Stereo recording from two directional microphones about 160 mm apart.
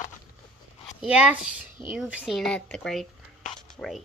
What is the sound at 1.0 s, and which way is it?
A woman's voice, 10° right (ahead or behind).